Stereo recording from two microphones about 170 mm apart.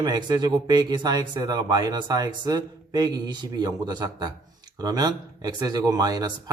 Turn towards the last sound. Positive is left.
turn(degrees=-20)  # may be behind; listen again after turning